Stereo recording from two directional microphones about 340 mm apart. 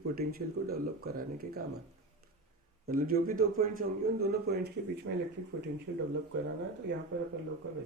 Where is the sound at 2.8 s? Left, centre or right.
Right.